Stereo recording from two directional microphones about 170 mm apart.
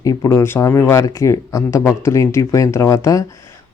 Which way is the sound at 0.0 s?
20° left (ahead or behind).